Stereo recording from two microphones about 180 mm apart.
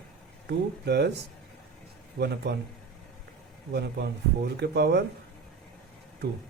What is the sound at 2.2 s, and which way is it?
Speech, 65° right (ahead or behind).